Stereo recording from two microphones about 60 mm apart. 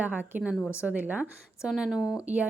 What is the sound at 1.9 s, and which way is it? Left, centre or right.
Speech, centre.